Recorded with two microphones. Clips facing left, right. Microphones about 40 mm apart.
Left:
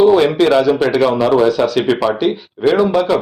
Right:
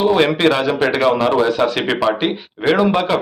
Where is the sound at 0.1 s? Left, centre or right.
Right.